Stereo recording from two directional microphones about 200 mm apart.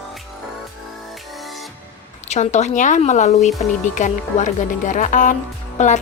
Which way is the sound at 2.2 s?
35° left (ahead or behind).